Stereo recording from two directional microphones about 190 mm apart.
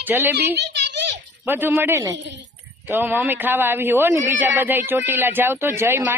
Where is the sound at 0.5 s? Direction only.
60° right (ahead or behind).